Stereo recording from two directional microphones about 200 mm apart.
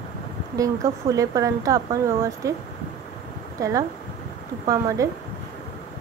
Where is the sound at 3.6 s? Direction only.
15° right (ahead or behind).